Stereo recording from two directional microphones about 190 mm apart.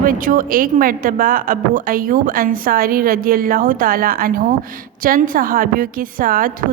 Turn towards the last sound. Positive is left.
turn(degrees=-45)  # may be behind; listen again after turning